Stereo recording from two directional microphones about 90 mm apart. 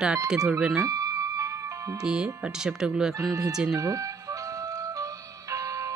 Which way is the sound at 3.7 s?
40° right (ahead or behind).